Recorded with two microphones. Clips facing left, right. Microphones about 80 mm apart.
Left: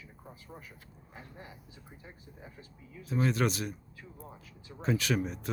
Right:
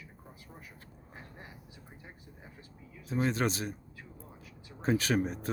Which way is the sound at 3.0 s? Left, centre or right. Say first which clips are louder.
Left 1 dB; right.